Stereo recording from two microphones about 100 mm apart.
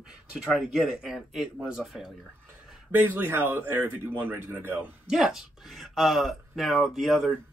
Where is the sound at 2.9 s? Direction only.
25° right (ahead or behind).